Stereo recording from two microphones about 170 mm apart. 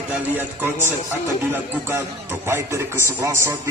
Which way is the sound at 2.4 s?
15° right (ahead or behind).